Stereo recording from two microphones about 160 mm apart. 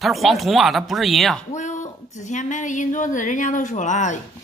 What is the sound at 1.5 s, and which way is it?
Speech, 50° left (ahead or behind).